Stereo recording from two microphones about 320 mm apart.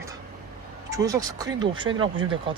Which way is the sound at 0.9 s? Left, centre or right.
Centre.